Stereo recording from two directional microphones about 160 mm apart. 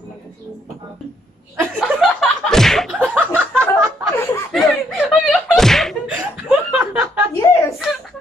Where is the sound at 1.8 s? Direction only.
Centre (ahead or behind).